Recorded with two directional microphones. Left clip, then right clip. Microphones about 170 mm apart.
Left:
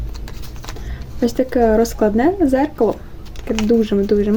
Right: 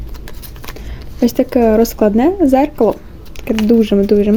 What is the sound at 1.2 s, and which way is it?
Speech, 25° right (ahead or behind).